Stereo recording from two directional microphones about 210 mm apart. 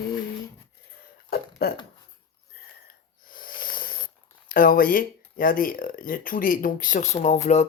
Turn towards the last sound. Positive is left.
turn(degrees=35)  # may be behind; listen again after turning